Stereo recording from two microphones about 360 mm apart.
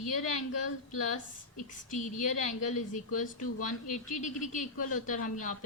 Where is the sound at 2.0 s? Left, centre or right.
Centre.